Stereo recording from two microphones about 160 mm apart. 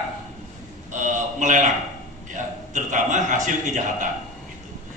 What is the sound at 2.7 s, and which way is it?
A man's voice, 50° right (ahead or behind).